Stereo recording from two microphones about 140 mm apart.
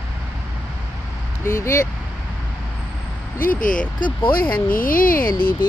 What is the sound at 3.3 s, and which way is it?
Speech, 80° left.